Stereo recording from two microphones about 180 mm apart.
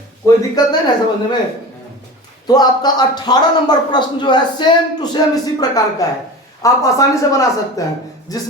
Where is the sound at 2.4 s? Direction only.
20° left (ahead or behind).